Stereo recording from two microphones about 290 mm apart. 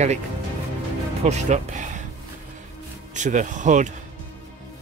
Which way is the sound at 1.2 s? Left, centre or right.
Right.